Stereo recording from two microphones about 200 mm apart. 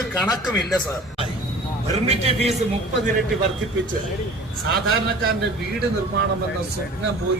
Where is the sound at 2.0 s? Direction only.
30° right (ahead or behind).